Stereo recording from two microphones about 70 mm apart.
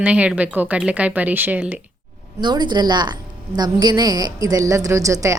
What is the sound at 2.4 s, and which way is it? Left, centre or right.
A woman's voice, right.